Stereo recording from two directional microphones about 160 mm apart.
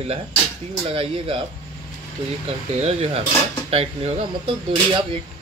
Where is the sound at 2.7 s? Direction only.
45° right (ahead or behind).